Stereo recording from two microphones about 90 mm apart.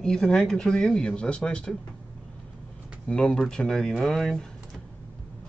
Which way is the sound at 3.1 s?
10° left (ahead or behind).